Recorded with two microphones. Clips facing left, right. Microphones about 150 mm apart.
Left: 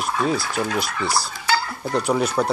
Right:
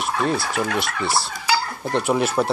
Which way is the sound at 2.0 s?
5° right (ahead or behind).